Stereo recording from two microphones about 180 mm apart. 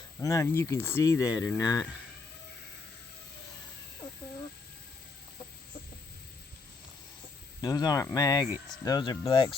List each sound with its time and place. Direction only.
0.2 s speech: 20° left (ahead or behind)
7.6 s speech: 20° left (ahead or behind)